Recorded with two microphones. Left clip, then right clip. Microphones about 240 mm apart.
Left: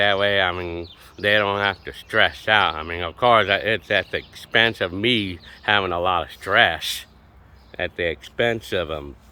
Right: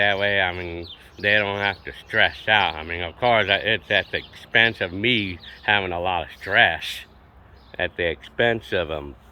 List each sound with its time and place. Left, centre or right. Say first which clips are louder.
0.0 s speech: left 2 dB; centre